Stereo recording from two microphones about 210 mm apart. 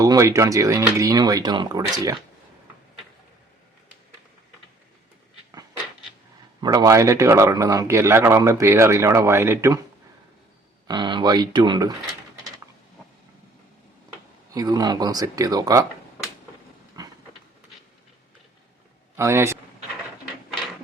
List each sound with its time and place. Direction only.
0.0 s speech: 15° right (ahead or behind)
6.6 s speech: 15° right (ahead or behind)
10.8 s speech: 20° right (ahead or behind)
14.5 s speech: 15° right (ahead or behind)
17.0 s vehicle: 20° right (ahead or behind)
19.1 s speech: 10° right (ahead or behind)